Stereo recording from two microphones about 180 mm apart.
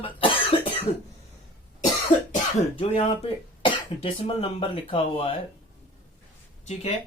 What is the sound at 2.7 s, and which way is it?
Speech, 30° left (ahead or behind).